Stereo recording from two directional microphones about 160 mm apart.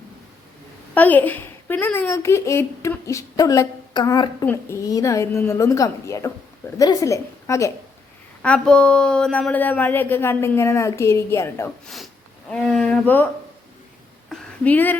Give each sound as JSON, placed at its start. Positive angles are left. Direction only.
{"t": 0.9, "sound": "a woman's voice", "side_deg": 10}
{"t": 8.4, "sound": "a woman's voice", "side_deg": 5}
{"t": 11.9, "sound": "speech", "side_deg": 0}
{"t": 14.3, "sound": "a sound", "side_deg": 10}